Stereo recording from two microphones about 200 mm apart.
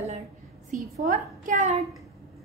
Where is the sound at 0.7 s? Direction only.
45° right (ahead or behind).